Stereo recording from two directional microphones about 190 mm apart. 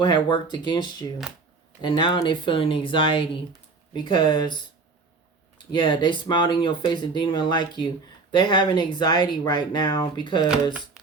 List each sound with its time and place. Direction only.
0.0 s speech: 25° left (ahead or behind)
5.5 s speech: 25° left (ahead or behind)